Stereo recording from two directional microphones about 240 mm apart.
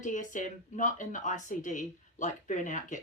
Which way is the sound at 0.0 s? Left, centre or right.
Left.